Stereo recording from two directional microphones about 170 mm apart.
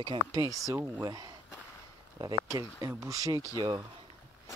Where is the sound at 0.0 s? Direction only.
25° right (ahead or behind).